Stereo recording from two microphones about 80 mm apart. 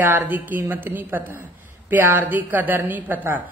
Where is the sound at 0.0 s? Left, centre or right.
Right.